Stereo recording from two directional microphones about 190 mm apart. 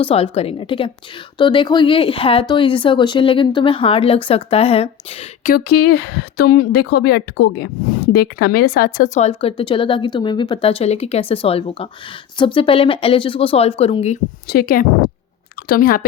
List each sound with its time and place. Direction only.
0.0 s speech: 30° left (ahead or behind)
5.6 s a woman's voice: 60° left (ahead or behind); by 9.3 s 40° left (ahead or behind)
9.4 s speech: 30° left (ahead or behind)
14.4 s a woman's voice: 55° left (ahead or behind)